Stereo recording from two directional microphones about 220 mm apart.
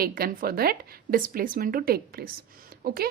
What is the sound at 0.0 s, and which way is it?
A woman's voice, 40° right (ahead or behind).